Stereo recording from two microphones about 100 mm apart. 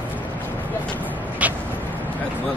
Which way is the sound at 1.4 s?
15° right (ahead or behind).